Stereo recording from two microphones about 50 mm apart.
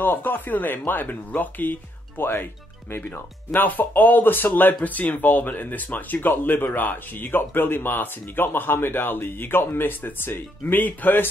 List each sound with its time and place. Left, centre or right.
0.0 s speech: left
3.5 s speech: left